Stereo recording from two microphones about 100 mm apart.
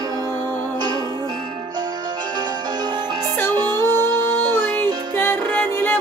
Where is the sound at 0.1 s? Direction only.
40° right (ahead or behind).